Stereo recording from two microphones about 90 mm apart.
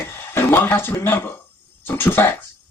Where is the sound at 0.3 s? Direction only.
25° left (ahead or behind).